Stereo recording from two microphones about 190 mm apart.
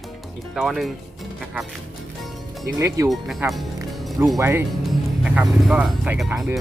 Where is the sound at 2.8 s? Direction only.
15° right (ahead or behind).